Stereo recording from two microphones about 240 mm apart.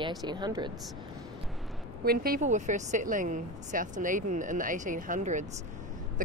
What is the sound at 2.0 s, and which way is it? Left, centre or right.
A woman's voice, right.